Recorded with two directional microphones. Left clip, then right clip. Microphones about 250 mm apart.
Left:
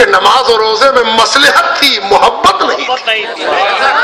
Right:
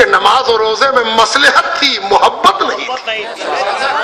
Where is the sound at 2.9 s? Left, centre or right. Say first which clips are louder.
Left 6 dB; left.